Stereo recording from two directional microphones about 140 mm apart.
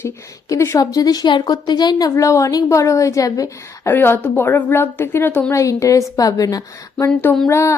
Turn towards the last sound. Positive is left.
turn(degrees=20)  # may be behind; listen again after turning